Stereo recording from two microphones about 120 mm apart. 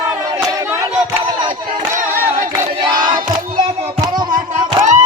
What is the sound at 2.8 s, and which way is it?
Crowd, 35° right (ahead or behind).